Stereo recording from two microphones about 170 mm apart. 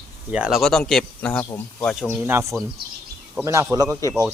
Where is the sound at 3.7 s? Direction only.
20° right (ahead or behind).